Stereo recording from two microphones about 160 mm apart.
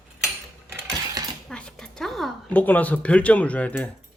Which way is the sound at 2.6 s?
10° left (ahead or behind).